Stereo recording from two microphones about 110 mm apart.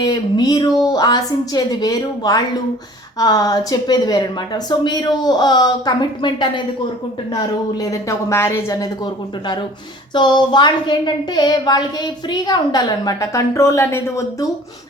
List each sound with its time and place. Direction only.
0.0 s a woman's voice: 40° left (ahead or behind)
7.3 s a woman's voice: 30° left (ahead or behind)
10.2 s a woman's voice: 45° left (ahead or behind); by 14.4 s 30° left (ahead or behind)